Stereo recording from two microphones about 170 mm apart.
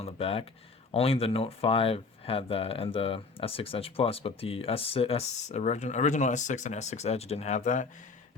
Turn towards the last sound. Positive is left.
turn(degrees=45)  # may be behind; listen again after turning